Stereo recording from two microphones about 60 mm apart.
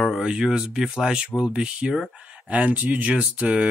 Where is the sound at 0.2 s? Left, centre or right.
Centre.